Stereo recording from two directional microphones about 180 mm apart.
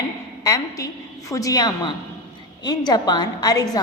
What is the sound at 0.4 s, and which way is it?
A woman's voice, 20° left (ahead or behind).